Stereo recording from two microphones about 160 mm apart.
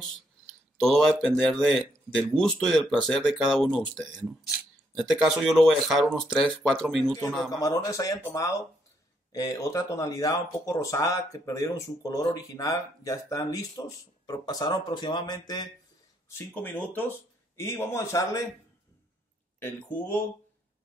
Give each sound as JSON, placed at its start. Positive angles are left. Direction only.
{"t": 0.7, "sound": "speech", "side_deg": 0}
{"t": 7.5, "sound": "speech", "side_deg": 20}
{"t": 16.3, "sound": "speech", "side_deg": 15}
{"t": 19.6, "sound": "speech", "side_deg": 10}